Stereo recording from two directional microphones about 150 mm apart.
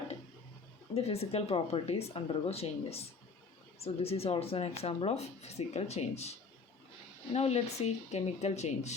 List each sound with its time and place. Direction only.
0.9 s speech: 40° left (ahead or behind)
7.3 s speech: 45° left (ahead or behind)